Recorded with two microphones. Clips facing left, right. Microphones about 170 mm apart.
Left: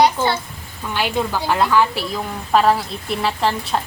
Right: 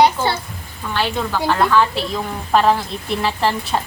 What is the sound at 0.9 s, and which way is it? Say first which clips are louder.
A woman's voice: even; 15° left (ahead or behind).